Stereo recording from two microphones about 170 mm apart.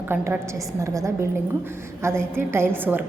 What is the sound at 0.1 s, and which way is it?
A woman's voice, 10° right (ahead or behind).